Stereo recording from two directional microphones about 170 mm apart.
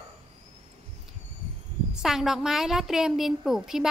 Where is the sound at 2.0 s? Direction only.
Centre (ahead or behind).